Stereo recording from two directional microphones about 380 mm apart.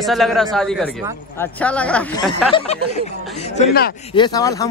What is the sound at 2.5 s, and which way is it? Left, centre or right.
A man's voice, centre.